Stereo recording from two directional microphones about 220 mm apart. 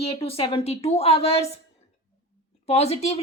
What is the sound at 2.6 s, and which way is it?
Speech, 30° left (ahead or behind).